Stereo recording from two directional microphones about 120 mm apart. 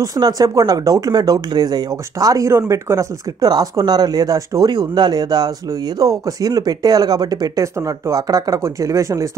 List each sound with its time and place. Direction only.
0.0 s speech: 30° right (ahead or behind)